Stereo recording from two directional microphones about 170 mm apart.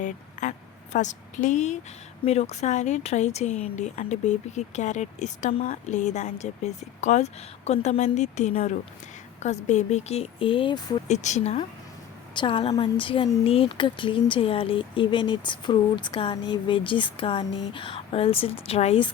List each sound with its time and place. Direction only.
0.0 s a sound: 45° left (ahead or behind)
0.9 s speech: 45° left (ahead or behind); by 11.2 s 30° left (ahead or behind)
11.2 s speech: 40° left (ahead or behind)
12.3 s speech: 30° left (ahead or behind)